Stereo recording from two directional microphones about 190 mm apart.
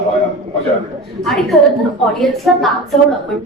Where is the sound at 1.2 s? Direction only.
Centre (ahead or behind).